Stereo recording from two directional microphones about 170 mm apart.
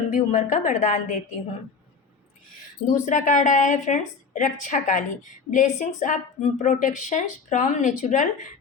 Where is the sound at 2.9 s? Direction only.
45° left (ahead or behind).